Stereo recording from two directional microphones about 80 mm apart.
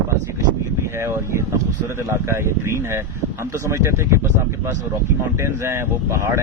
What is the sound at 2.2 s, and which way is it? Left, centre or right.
Speech, right.